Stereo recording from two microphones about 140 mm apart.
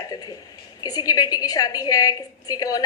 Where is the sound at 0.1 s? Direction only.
25° left (ahead or behind).